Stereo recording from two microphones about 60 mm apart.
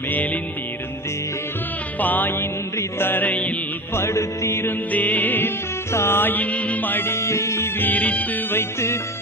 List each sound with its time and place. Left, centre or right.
2.0 s music: left
3.9 s music: left
4.9 s music: left
5.9 s music: left
7.8 s music: left
8.4 s music: left